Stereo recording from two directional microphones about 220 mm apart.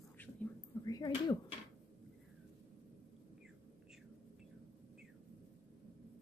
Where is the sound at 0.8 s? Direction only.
20° left (ahead or behind).